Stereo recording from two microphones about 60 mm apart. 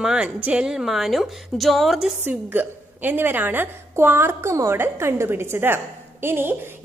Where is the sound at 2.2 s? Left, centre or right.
Right.